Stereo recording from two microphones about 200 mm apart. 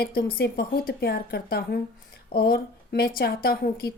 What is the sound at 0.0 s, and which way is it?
Speech, 50° left (ahead or behind).